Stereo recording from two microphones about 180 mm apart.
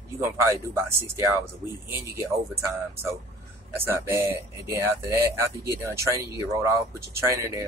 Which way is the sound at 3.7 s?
10° right (ahead or behind).